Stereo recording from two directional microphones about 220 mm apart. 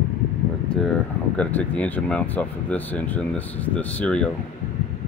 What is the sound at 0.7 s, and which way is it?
Speech, 5° left (ahead or behind).